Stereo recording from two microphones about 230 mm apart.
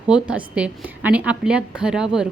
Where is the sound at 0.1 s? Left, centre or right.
Centre.